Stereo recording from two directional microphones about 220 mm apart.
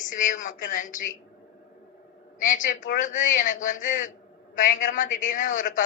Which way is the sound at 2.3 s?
35° left (ahead or behind).